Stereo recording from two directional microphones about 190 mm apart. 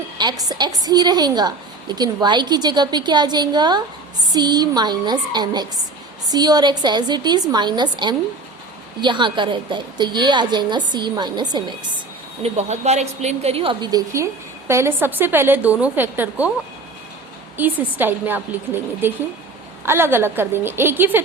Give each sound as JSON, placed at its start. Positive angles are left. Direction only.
{"t": 0.2, "sound": "a woman's voice", "side_deg": -20}
{"t": 12.4, "sound": "a woman's voice", "side_deg": -35}
{"t": 17.6, "sound": "a woman's voice", "side_deg": -10}